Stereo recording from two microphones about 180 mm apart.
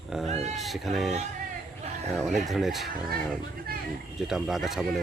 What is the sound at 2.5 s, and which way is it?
Speech, centre (ahead or behind).